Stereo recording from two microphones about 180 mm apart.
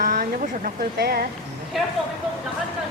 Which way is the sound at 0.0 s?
50° right (ahead or behind).